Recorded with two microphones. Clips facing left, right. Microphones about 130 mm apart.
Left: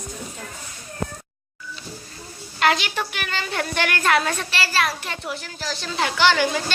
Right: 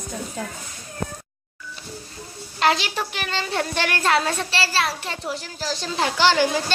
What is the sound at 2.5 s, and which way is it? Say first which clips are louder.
A woman's voice: even; 30° right (ahead or behind).